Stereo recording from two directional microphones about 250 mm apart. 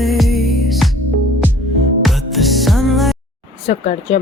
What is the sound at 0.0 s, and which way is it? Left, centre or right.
Music, centre.